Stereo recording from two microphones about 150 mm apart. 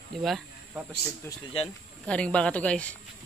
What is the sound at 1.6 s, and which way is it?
Speech, 40° left (ahead or behind).